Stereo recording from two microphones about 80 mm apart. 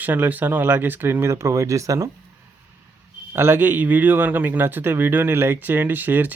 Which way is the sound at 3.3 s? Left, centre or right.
Right.